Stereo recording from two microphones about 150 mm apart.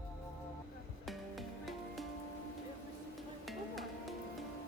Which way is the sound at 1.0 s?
Centre (ahead or behind).